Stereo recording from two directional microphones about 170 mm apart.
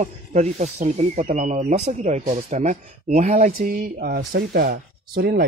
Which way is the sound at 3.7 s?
60° right (ahead or behind).